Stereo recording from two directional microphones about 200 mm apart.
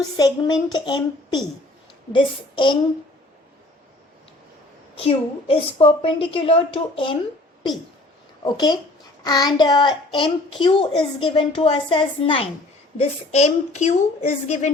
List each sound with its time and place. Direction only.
0.0 s a child's voice: 20° left (ahead or behind)
4.9 s a child's voice: 30° left (ahead or behind)
8.4 s a child's voice: 20° left (ahead or behind)